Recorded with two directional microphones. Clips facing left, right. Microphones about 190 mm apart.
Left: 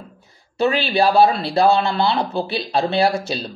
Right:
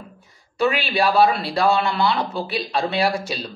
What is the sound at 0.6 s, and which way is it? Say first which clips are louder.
Speech: left 2 dB; 30° left (ahead or behind).